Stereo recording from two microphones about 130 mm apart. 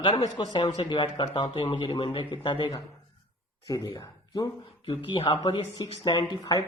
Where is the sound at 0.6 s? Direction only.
45° left (ahead or behind); by 4.4 s 30° left (ahead or behind).